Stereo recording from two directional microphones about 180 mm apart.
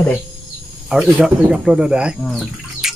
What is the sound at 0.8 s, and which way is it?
Speech, 10° right (ahead or behind).